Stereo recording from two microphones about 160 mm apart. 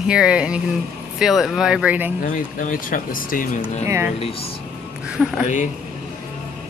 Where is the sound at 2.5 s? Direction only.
55° left (ahead or behind).